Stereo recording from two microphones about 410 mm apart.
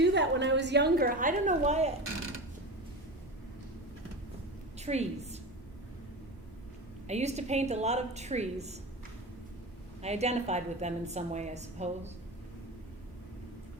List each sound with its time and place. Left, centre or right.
0.0 s a woman's voice: right
4.8 s a woman's voice: centre
7.1 s a woman's voice: centre
10.0 s a woman's voice: centre